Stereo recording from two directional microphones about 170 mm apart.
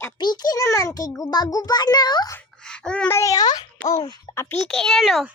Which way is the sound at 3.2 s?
20° left (ahead or behind).